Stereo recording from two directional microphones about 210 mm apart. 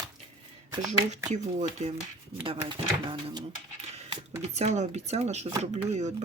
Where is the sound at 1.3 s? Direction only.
35° right (ahead or behind).